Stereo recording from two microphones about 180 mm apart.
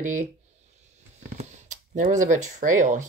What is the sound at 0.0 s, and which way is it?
Speech, 45° right (ahead or behind).